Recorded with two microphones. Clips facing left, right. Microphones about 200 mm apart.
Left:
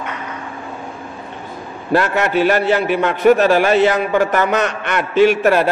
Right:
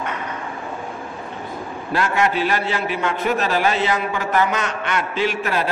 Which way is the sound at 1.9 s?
60° left (ahead or behind).